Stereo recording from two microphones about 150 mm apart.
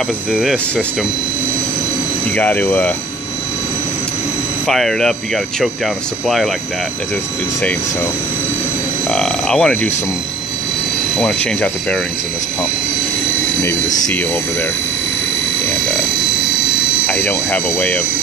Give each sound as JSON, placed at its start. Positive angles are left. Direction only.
{"t": 0.3, "sound": "speech", "side_deg": 0}
{"t": 2.3, "sound": "speech", "side_deg": 10}
{"t": 4.6, "sound": "speech", "side_deg": 5}
{"t": 9.1, "sound": "speech", "side_deg": 5}
{"t": 11.1, "sound": "speech", "side_deg": 5}
{"t": 13.6, "sound": "speech", "side_deg": 15}
{"t": 17.0, "sound": "speech", "side_deg": 10}